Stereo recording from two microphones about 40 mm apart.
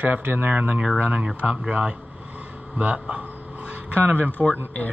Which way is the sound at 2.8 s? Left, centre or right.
Right.